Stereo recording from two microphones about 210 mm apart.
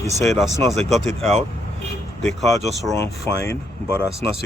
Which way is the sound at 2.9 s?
15° left (ahead or behind).